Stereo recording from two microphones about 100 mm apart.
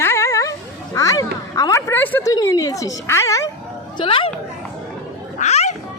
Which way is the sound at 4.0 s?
60° left (ahead or behind).